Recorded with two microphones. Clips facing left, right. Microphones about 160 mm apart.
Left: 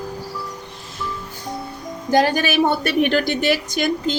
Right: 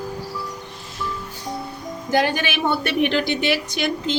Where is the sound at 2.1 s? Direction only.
40° left (ahead or behind).